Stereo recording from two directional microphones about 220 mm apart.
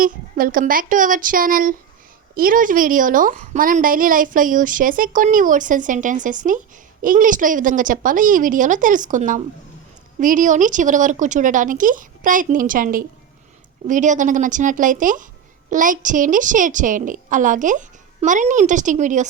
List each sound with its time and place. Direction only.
0.0 s a woman's voice: 40° right (ahead or behind)